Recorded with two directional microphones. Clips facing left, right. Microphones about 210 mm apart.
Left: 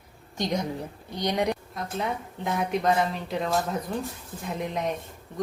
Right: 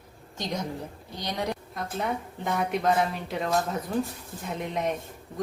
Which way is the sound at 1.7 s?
Centre (ahead or behind).